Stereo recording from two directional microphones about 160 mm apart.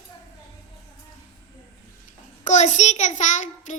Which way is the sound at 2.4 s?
50° left (ahead or behind).